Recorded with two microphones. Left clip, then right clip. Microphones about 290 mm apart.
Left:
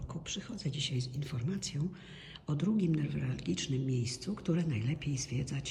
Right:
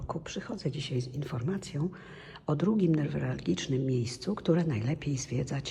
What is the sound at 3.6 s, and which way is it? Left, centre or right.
Speech, right.